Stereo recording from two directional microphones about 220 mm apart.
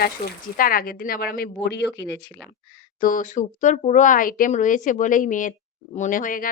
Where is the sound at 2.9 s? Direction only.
40° left (ahead or behind).